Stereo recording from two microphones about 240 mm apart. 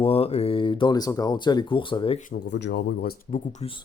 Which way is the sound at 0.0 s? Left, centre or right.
Left.